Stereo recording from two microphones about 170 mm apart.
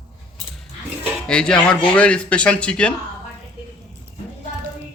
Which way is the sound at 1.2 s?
5° left (ahead or behind).